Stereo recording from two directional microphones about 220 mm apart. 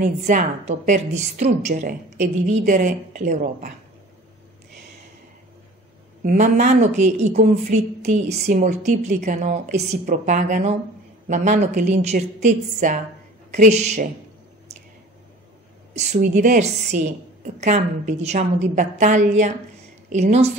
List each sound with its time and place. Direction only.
0.0 s a woman's voice: 40° right (ahead or behind)
6.2 s a woman's voice: 35° right (ahead or behind)
15.9 s a woman's voice: 30° right (ahead or behind)